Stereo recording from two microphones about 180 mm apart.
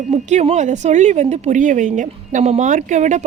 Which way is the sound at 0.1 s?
40° right (ahead or behind).